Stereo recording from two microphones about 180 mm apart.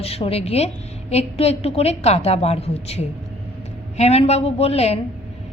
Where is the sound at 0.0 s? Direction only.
35° left (ahead or behind).